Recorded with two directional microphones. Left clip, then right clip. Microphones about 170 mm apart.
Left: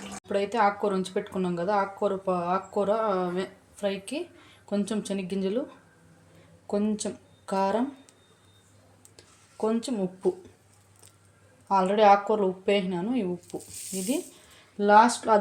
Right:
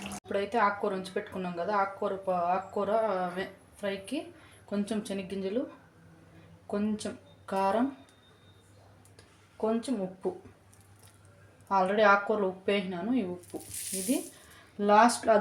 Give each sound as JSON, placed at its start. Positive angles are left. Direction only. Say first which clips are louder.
{"t": 0.3, "sound": "speech", "louder": "left 3 dB", "side_deg": 25}
{"t": 6.7, "sound": "speech", "louder": "left 5 dB", "side_deg": 30}
{"t": 9.1, "sound": "a sound", "louder": "left 4 dB", "side_deg": 40}
{"t": 11.7, "sound": "speech", "louder": "left 4 dB", "side_deg": 25}
{"t": 14.8, "sound": "speech", "louder": "left 4 dB", "side_deg": 20}